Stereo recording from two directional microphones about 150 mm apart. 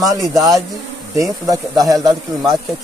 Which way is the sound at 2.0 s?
Centre (ahead or behind).